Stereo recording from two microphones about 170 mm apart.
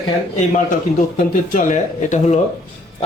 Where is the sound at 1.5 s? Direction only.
45° left (ahead or behind).